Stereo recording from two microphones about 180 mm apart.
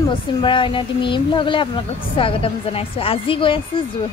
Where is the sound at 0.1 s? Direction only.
30° left (ahead or behind).